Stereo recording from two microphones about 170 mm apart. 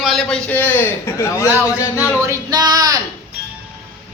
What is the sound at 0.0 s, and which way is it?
A woman's voice, centre (ahead or behind).